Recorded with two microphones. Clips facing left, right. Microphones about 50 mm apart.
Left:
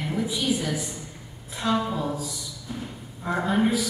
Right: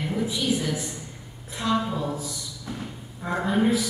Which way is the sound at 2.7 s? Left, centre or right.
Right.